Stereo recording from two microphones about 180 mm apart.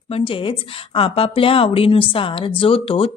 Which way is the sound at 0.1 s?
30° left (ahead or behind).